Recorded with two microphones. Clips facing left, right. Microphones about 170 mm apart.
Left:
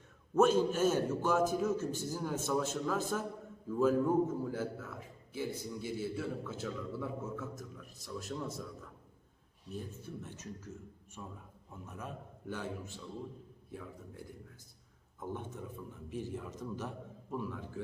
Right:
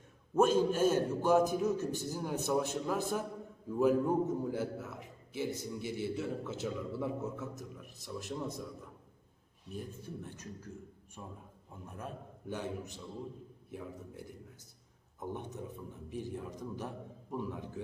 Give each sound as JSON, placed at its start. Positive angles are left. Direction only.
{"t": 0.3, "sound": "a man's voice", "side_deg": -10}
{"t": 9.7, "sound": "a man's voice", "side_deg": -15}
{"t": 12.5, "sound": "a man's voice", "side_deg": -20}
{"t": 15.2, "sound": "a man's voice", "side_deg": -15}